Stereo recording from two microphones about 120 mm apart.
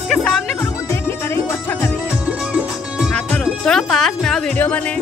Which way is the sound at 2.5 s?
10° right (ahead or behind).